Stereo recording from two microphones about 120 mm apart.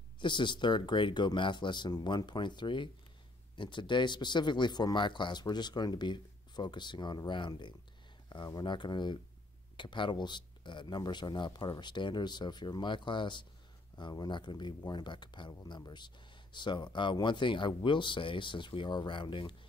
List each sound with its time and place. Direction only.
0.2 s speech: 40° left (ahead or behind)